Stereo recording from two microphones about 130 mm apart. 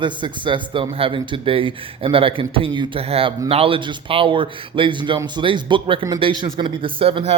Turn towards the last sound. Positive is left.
turn(degrees=-45)  # may be behind; listen again after turning